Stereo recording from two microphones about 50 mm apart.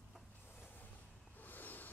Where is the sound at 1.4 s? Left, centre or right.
Left.